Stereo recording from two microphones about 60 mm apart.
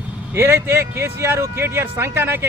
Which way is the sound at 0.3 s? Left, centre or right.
Right.